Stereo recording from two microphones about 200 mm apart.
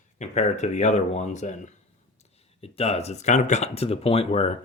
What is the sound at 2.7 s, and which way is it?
Speech, 30° left (ahead or behind).